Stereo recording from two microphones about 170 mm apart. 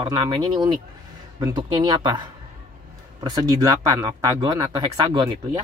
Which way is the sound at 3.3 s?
25° right (ahead or behind).